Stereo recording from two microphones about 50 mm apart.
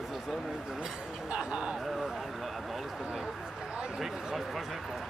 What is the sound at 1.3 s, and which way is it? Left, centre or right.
Speech, centre.